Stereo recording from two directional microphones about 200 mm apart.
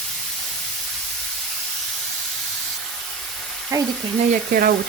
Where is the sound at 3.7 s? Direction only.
15° right (ahead or behind).